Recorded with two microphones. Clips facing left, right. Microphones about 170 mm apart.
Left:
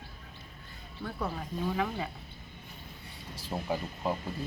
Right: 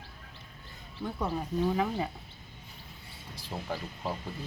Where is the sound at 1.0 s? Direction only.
20° right (ahead or behind).